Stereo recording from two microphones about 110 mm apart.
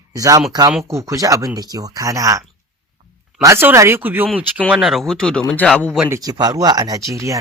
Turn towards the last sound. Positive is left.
turn(degrees=-30)  # may be behind; listen again after turning